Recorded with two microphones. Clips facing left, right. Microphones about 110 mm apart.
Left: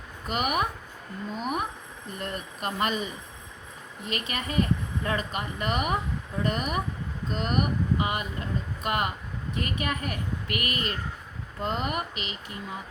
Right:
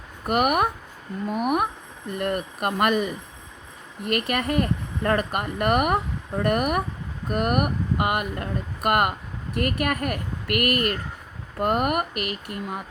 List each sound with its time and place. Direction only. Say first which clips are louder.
0.3 s speech: right 6 dB; 55° right (ahead or behind)